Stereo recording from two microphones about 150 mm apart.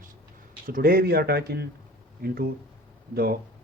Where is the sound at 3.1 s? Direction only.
90° right.